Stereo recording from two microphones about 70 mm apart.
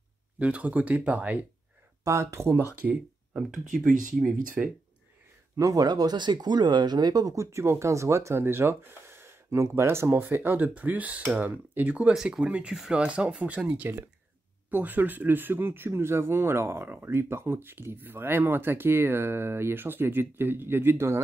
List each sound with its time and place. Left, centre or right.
0.4 s speech: centre
2.0 s speech: right
2.8 s speech: centre
3.3 s speech: centre
5.6 s speech: right
7.3 s speech: right
12.1 s speech: centre; by 21.2 s right